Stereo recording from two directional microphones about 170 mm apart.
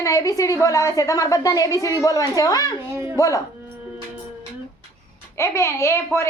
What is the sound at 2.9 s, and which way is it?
Speech, 15° right (ahead or behind).